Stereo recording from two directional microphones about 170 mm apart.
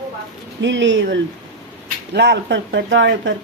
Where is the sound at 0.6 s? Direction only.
90° right.